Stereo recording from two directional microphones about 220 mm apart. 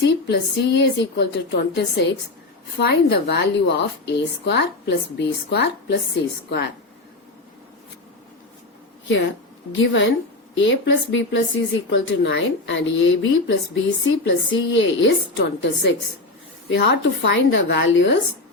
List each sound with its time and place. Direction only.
0.0 s speech: 50° left (ahead or behind)
9.7 s a woman's voice: 55° left (ahead or behind)